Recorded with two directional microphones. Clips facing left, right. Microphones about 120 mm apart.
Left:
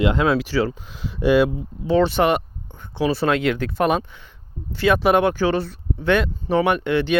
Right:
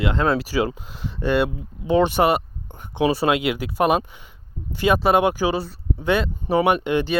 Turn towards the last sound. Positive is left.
turn(degrees=-15)  # may be behind; listen again after turning